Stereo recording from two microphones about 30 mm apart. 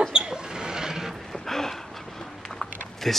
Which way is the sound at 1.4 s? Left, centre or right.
Centre.